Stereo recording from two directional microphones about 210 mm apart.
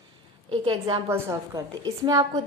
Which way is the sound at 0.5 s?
25° right (ahead or behind).